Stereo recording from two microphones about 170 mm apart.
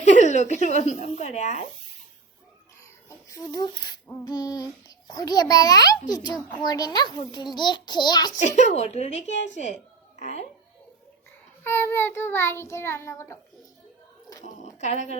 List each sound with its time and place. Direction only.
0.0 s a sound: 45° left (ahead or behind)
0.5 s a woman's voice: 45° left (ahead or behind)
2.8 s a sound: 20° left (ahead or behind)
4.1 s a child's voice: 20° left (ahead or behind)
8.4 s a woman's voice: 45° left (ahead or behind)
11.6 s child singing: 15° left (ahead or behind)
14.4 s speech: 45° left (ahead or behind)